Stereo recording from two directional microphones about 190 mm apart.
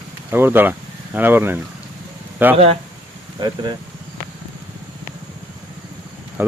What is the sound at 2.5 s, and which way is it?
Speech, 30° right (ahead or behind).